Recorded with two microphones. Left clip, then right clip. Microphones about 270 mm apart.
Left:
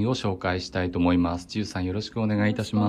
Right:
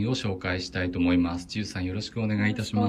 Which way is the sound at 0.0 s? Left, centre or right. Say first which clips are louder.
Left 3 dB; centre.